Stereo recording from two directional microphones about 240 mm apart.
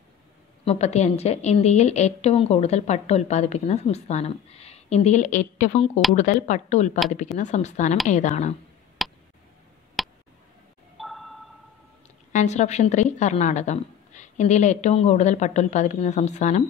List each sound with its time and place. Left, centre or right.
0.7 s a woman's voice: left
9.0 s tick: centre
11.0 s a sound: centre
12.3 s a woman's voice: left